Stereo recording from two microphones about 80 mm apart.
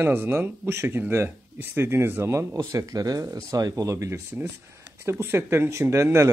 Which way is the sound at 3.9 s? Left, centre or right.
Right.